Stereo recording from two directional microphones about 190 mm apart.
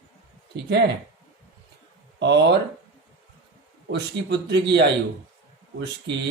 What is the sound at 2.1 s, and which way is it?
Speech, 65° right (ahead or behind).